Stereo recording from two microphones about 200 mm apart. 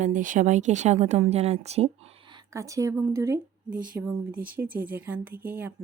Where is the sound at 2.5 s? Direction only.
15° right (ahead or behind).